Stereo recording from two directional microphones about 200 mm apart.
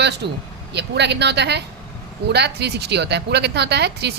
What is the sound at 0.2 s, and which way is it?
Speech, 60° right (ahead or behind).